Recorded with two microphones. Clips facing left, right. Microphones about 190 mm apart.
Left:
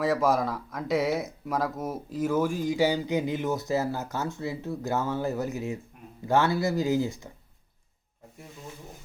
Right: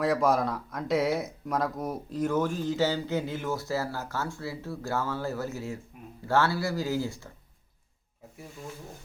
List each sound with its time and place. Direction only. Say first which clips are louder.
0.0 s speech: even; centre (ahead or behind); by 7.3 s 15° left (ahead or behind)